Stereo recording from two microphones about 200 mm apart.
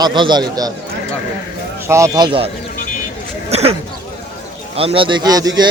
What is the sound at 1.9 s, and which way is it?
Speech, 15° right (ahead or behind).